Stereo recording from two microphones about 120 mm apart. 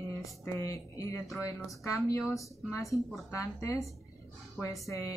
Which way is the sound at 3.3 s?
25° left (ahead or behind).